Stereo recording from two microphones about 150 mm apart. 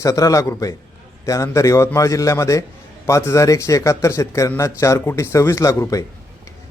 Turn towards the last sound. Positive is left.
turn(degrees=20)  # may be behind; listen again after turning